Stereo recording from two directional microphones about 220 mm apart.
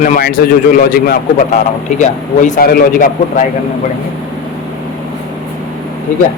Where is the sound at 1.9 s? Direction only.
35° left (ahead or behind).